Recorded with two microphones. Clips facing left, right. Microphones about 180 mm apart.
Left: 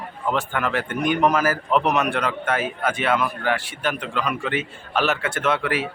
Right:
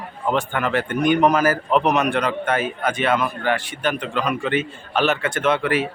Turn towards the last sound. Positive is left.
turn(degrees=0)  # may be behind; listen again after turning